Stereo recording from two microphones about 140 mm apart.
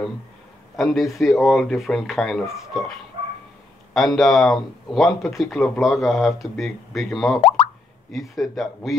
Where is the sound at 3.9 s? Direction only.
Centre (ahead or behind).